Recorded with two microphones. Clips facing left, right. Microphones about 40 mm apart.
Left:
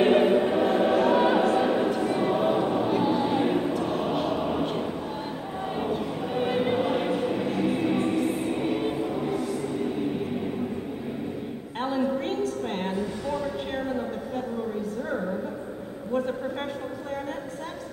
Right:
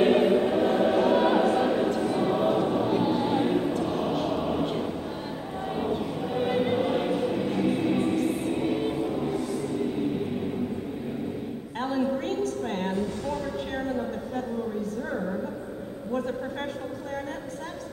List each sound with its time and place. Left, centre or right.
0.0 s choir: centre
12.3 s music: left
13.8 s a sound: centre